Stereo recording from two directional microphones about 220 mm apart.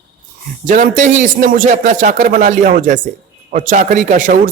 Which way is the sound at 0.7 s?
35° right (ahead or behind).